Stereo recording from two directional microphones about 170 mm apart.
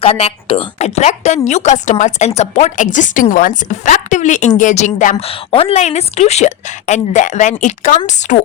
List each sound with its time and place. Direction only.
0.0 s a woman's voice: 35° left (ahead or behind)
5.3 s a woman's voice: 35° left (ahead or behind)